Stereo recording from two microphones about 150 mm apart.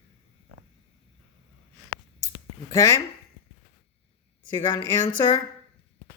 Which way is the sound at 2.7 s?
20° left (ahead or behind).